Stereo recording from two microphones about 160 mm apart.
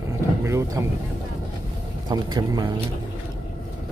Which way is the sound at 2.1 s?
25° right (ahead or behind).